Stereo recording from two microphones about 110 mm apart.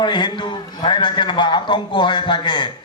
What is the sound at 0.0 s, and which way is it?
A man's voice, 45° left (ahead or behind).